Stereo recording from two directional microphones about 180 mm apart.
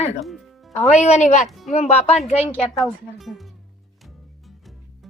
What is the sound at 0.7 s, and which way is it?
Speech, 40° left (ahead or behind).